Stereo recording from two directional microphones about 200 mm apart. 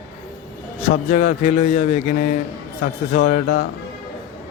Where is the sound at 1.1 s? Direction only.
35° left (ahead or behind).